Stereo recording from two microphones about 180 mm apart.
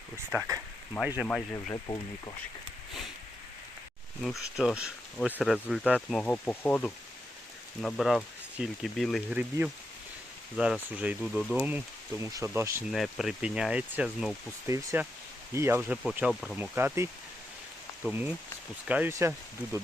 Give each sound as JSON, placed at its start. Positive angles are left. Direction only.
{"t": 0.3, "sound": "speech", "side_deg": -15}
{"t": 1.3, "sound": "speech", "side_deg": 5}
{"t": 1.7, "sound": "speech", "side_deg": 25}
{"t": 4.2, "sound": "speech", "side_deg": 0}
{"t": 12.9, "sound": "speech", "side_deg": 0}
{"t": 14.7, "sound": "speech", "side_deg": -15}
{"t": 16.6, "sound": "speech", "side_deg": -10}